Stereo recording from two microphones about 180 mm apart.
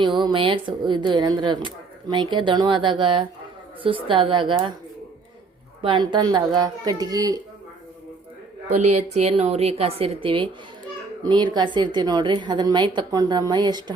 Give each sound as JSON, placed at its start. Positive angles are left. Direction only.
{"t": 0.0, "sound": "speech", "side_deg": -25}
{"t": 5.8, "sound": "speech", "side_deg": -25}
{"t": 8.8, "sound": "a woman's voice", "side_deg": -40}